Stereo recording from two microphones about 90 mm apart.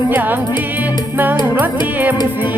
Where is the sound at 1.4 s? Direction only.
20° right (ahead or behind).